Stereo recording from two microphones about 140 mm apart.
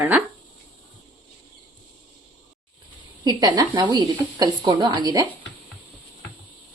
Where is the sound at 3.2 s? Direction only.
30° right (ahead or behind).